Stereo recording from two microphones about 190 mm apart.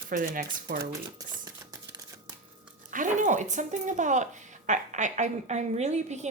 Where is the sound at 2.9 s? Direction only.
40° right (ahead or behind).